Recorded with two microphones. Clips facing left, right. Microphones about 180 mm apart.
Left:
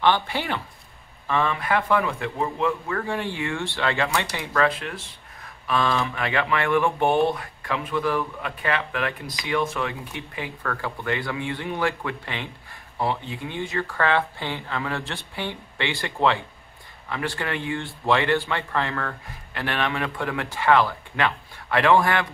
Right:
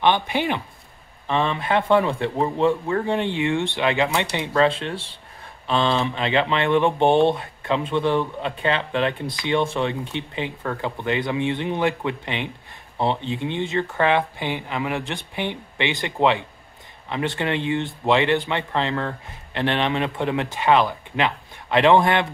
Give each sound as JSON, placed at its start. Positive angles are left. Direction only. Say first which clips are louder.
{"t": 0.0, "sound": "speech", "louder": "right 2 dB", "side_deg": -20}